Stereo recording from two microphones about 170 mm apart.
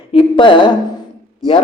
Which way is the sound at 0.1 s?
30° left (ahead or behind).